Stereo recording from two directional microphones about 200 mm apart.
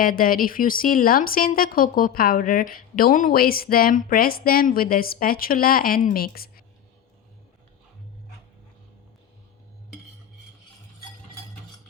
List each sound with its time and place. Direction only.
0.0 s speech: 45° left (ahead or behind)